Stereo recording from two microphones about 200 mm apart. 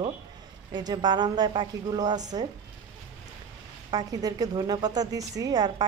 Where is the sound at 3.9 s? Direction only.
20° right (ahead or behind).